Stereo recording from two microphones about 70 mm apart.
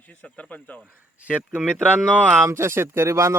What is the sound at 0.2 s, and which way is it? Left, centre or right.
Speech, left.